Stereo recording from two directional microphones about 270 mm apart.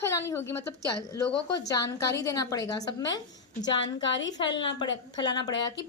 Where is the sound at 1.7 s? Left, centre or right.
Centre.